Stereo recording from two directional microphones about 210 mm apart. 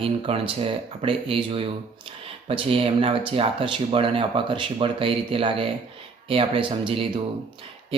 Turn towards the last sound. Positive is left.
turn(degrees=-25)  # may be behind; listen again after turning